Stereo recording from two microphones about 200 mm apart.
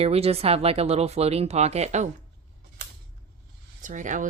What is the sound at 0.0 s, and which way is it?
Speech, 30° right (ahead or behind).